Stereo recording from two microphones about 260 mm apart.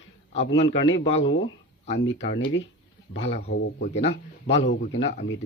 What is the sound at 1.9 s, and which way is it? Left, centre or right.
Speech, left.